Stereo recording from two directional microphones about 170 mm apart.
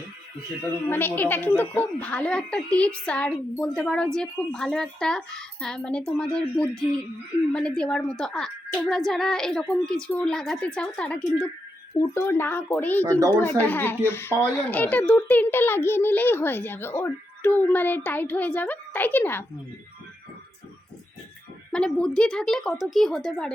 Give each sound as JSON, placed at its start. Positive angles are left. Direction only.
{"t": 0.9, "sound": "a child's voice", "side_deg": 10}
{"t": 13.1, "sound": "speech", "side_deg": -20}
{"t": 13.3, "sound": "a child's voice", "side_deg": 10}
{"t": 21.7, "sound": "a woman's voice", "side_deg": 5}